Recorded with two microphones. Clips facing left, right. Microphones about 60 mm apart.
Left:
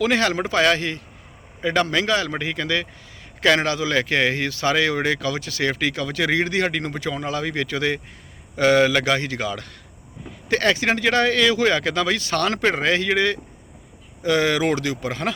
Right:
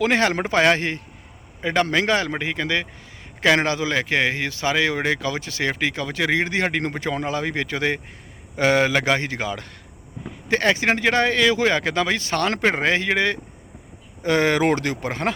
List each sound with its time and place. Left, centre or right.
0.0 s speech: right
3.9 s speech: centre
14.2 s speech: right